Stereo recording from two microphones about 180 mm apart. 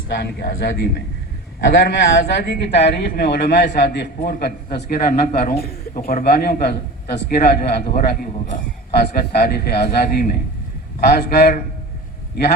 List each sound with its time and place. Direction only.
0.1 s a man's voice: 65° left (ahead or behind)